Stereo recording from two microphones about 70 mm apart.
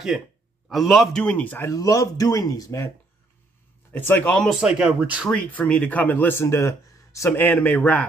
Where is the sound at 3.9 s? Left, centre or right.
Left.